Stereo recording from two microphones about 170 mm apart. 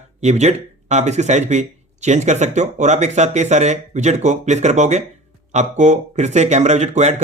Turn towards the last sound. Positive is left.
turn(degrees=-45)  # may be behind; listen again after turning